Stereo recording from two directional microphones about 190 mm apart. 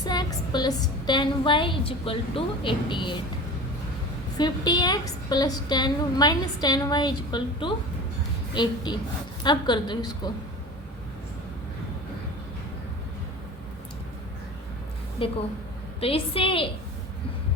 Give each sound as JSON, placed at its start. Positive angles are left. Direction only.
{"t": 0.0, "sound": "a woman's voice", "side_deg": 20}
{"t": 4.4, "sound": "a woman's voice", "side_deg": 20}
{"t": 15.2, "sound": "a woman's voice", "side_deg": 30}